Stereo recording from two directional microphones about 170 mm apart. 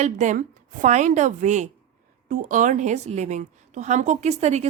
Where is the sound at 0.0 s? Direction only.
45° right (ahead or behind).